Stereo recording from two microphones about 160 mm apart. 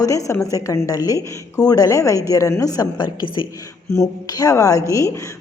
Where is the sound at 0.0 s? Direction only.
20° left (ahead or behind).